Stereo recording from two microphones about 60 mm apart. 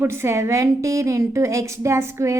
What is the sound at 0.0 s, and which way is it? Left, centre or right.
A woman's voice, right.